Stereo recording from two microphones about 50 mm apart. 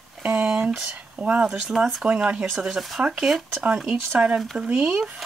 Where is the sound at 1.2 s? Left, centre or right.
Right.